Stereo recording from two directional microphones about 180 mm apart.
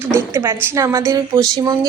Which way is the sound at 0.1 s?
15° right (ahead or behind).